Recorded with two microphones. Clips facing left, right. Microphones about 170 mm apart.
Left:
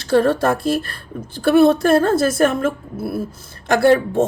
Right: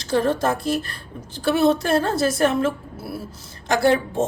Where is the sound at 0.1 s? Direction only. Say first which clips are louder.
Left 5 dB; 60° left (ahead or behind).